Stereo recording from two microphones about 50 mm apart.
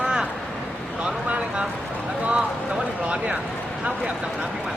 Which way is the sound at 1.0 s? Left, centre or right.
Right.